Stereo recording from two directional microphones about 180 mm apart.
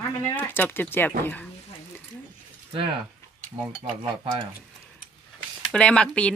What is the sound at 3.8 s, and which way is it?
Stir, 40° right (ahead or behind).